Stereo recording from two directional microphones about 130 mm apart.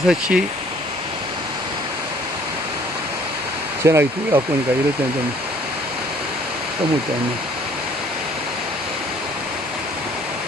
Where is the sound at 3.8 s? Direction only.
20° right (ahead or behind).